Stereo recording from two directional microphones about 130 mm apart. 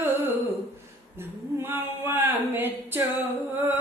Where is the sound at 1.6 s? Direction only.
20° right (ahead or behind).